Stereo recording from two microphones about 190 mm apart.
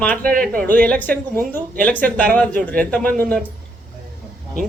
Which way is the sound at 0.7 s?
10° left (ahead or behind).